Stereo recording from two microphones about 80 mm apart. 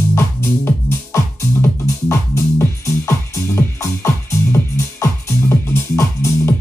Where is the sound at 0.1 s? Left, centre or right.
Left.